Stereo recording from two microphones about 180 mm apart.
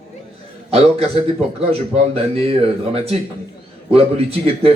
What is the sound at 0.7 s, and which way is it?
A man's voice, 35° right (ahead or behind).